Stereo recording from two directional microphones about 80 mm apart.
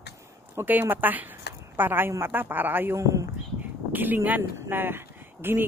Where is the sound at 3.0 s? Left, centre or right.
Right.